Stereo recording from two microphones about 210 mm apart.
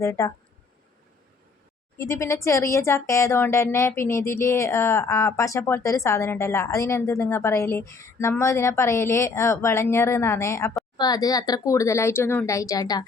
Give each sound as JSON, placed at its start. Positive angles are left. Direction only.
{"t": 0.0, "sound": "speech", "side_deg": 15}
{"t": 2.0, "sound": "speech", "side_deg": 15}